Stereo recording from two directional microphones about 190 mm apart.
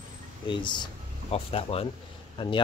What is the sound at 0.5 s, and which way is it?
Speech, 25° left (ahead or behind).